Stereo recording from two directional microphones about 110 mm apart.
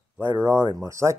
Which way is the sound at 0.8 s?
25° right (ahead or behind).